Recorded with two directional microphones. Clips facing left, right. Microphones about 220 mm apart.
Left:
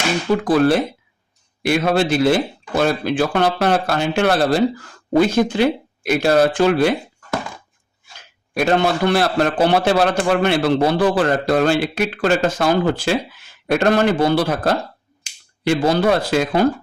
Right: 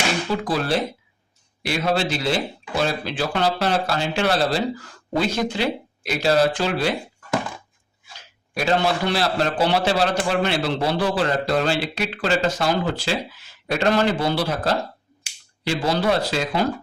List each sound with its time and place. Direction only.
0.4 s a man's voice: 50° left (ahead or behind)
8.5 s a man's voice: 55° left (ahead or behind)